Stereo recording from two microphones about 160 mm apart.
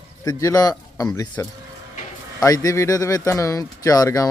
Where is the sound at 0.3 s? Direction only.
20° left (ahead or behind).